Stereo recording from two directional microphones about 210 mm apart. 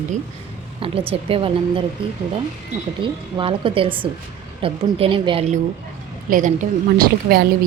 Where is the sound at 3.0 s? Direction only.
25° right (ahead or behind).